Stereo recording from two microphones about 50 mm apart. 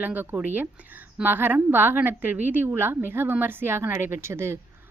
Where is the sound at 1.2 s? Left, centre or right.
Right.